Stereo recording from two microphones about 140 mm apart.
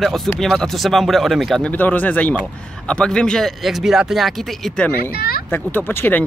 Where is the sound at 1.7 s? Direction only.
10° left (ahead or behind).